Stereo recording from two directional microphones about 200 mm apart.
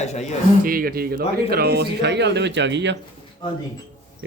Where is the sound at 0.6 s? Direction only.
45° right (ahead or behind).